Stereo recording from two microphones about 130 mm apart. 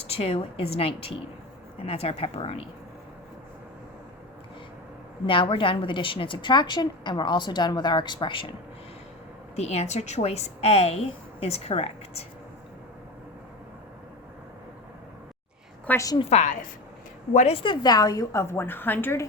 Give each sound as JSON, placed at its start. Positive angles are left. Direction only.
{"t": 0.0, "sound": "a woman's voice", "side_deg": 50}
{"t": 5.2, "sound": "a woman's voice", "side_deg": 40}
{"t": 9.6, "sound": "a woman's voice", "side_deg": 55}
{"t": 15.9, "sound": "a woman's voice", "side_deg": 25}
{"t": 16.3, "sound": "a woman's voice", "side_deg": 65}
{"t": 17.3, "sound": "a woman's voice", "side_deg": 50}